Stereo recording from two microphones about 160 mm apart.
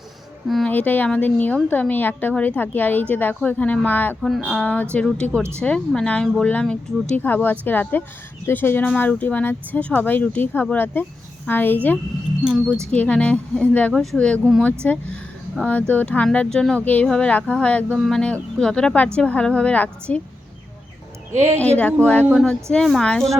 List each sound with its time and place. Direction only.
0.4 s a woman's voice: 5° left (ahead or behind)
5.4 s speech: 15° right (ahead or behind)
5.6 s a woman's voice: 5° left (ahead or behind)
12.5 s speech: 15° right (ahead or behind)
12.9 s a woman's voice: 10° left (ahead or behind)
17.8 s speech: 10° right (ahead or behind)
18.1 s a woman's voice: 5° left (ahead or behind)
21.3 s speech: 45° right (ahead or behind)
22.0 s a woman's voice: 10° left (ahead or behind)